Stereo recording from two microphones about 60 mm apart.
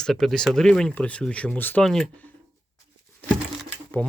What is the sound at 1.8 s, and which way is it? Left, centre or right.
Speech, centre.